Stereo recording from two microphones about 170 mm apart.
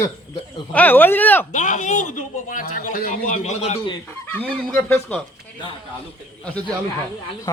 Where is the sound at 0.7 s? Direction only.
10° left (ahead or behind).